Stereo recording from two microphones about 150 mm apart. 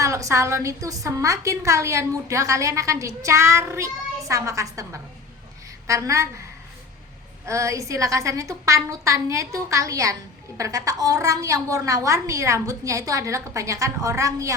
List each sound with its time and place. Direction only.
0.0 s a woman's voice: 20° right (ahead or behind)
7.4 s a woman's voice: 20° right (ahead or behind)